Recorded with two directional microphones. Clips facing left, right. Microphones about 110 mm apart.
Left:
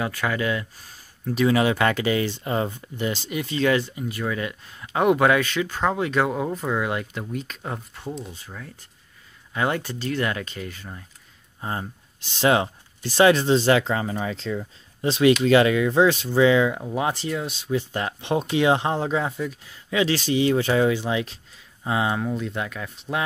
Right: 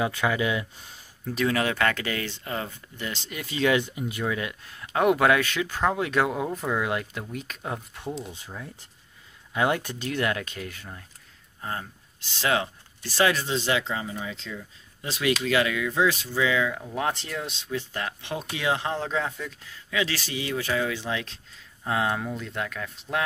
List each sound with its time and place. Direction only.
0.0 s speech: 15° right (ahead or behind)
1.2 s speech: 5° left (ahead or behind); by 3.1 s 25° left (ahead or behind)
3.3 s speech: 5° left (ahead or behind)
3.5 s speech: 5° right (ahead or behind)
11.6 s speech: 20° left (ahead or behind); by 15.0 s 40° left (ahead or behind)
15.0 s speech: 30° left (ahead or behind)
16.9 s speech: 5° left (ahead or behind)
17.6 s speech: 20° left (ahead or behind)
19.9 s speech: 25° left (ahead or behind)
20.9 s speech: 15° left (ahead or behind)